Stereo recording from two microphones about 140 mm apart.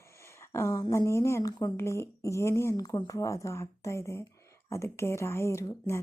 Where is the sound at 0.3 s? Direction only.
20° left (ahead or behind).